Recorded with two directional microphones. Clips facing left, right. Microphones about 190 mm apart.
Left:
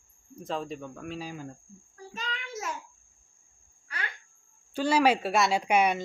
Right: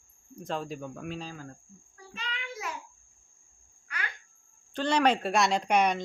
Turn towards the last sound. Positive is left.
turn(degrees=5)  # may be behind; listen again after turning